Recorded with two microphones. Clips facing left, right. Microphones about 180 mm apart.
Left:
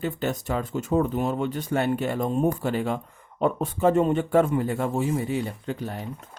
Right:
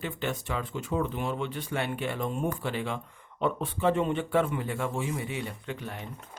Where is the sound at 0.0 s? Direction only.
40° left (ahead or behind).